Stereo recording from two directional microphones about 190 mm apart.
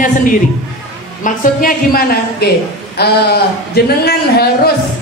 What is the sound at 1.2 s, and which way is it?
A woman's voice, 45° left (ahead or behind).